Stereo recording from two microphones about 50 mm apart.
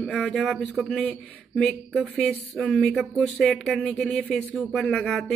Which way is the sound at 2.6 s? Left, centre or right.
Centre.